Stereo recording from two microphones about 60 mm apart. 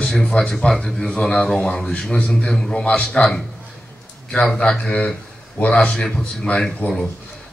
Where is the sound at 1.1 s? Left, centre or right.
Centre.